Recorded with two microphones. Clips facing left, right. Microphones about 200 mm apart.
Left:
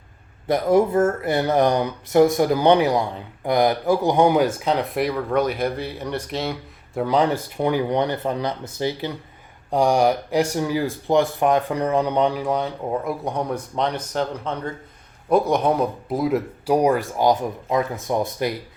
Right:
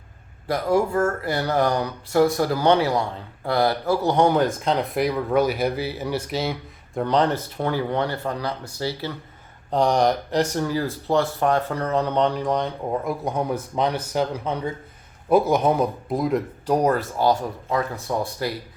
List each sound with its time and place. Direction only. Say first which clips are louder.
0.4 s speech: left 4 dB; 20° left (ahead or behind)